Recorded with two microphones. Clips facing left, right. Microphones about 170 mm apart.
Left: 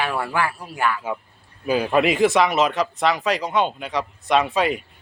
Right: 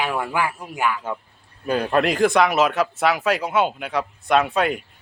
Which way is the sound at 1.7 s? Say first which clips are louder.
Left 1 dB; 5° left (ahead or behind).